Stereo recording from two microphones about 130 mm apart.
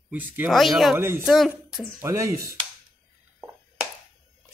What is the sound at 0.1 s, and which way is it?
Speech, 15° right (ahead or behind).